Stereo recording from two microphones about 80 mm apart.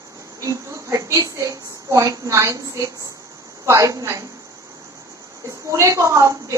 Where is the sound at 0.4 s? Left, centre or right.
Right.